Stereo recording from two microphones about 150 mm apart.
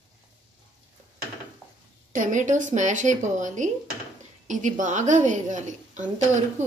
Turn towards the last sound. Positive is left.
turn(degrees=-50)  # may be behind; listen again after turning